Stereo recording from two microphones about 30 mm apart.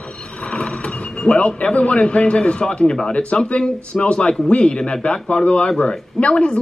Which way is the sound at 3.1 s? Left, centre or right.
Left.